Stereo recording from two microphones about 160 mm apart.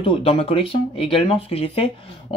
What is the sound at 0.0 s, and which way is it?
Speech, 35° left (ahead or behind).